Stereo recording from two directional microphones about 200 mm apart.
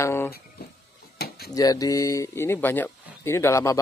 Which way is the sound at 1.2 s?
50° left (ahead or behind).